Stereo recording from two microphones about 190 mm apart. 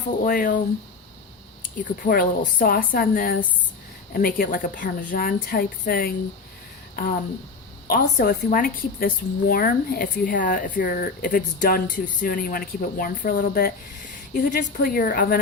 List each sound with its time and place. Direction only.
0.3 s a woman's voice: 45° left (ahead or behind)
1.6 s a woman's voice: 50° left (ahead or behind)